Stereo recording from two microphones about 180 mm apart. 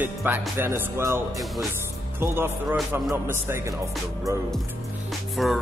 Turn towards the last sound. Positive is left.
turn(degrees=0)  # may be behind; listen again after turning